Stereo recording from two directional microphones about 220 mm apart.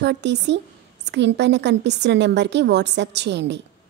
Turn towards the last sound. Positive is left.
turn(degrees=-50)  # may be behind; listen again after turning